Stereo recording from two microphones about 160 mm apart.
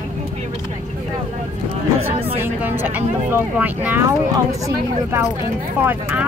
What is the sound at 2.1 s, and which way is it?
Speech, 35° right (ahead or behind).